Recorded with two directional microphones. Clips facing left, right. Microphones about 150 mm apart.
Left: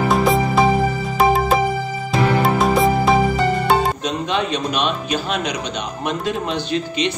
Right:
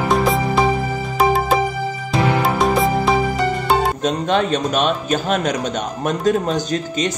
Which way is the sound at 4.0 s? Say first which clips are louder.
Right 4 dB; 45° right (ahead or behind).